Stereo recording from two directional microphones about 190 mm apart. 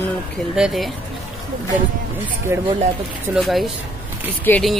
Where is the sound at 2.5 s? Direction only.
15° right (ahead or behind).